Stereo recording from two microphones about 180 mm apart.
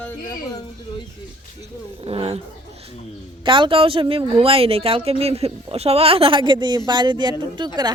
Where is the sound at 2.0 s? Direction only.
30° right (ahead or behind).